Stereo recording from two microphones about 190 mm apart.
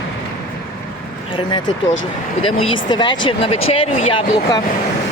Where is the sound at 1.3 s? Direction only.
25° left (ahead or behind).